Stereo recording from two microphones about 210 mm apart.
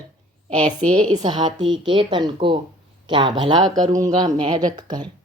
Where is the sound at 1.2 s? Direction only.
20° right (ahead or behind).